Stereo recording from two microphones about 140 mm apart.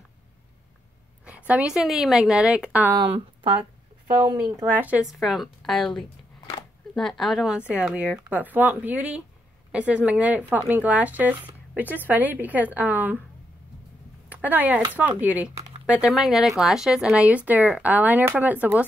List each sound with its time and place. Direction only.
1.2 s speech: 10° right (ahead or behind)
2.9 s speech: 30° right (ahead or behind)
4.1 s speech: 10° right (ahead or behind)
5.0 s a woman's voice: centre (ahead or behind)
14.3 s speech: 10° right (ahead or behind)